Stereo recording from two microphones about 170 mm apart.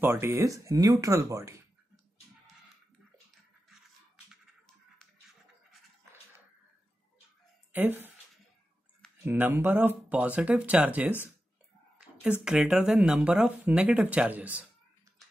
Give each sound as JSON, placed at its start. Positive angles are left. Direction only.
{"t": 0.0, "sound": "speech", "side_deg": -15}
{"t": 7.7, "sound": "speech", "side_deg": -10}
{"t": 9.2, "sound": "speech", "side_deg": -10}
{"t": 12.2, "sound": "speech", "side_deg": -5}